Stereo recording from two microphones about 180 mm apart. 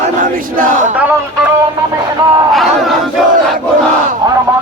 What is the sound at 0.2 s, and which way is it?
Battle cry, 50° right (ahead or behind).